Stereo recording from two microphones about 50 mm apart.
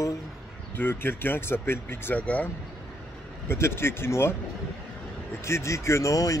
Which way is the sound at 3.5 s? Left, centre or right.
Left.